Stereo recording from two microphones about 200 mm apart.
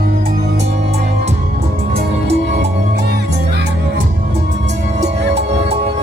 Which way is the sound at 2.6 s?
55° right (ahead or behind).